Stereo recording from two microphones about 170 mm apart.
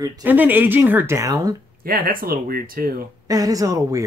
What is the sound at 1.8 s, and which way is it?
Speech, 60° right (ahead or behind).